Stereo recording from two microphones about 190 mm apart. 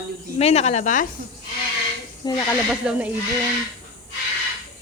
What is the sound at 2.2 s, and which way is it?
Speech, 25° left (ahead or behind).